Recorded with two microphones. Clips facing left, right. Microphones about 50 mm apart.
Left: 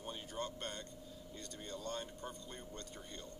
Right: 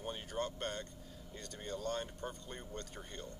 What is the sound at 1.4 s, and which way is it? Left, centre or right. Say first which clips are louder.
Speech: right 4 dB; right.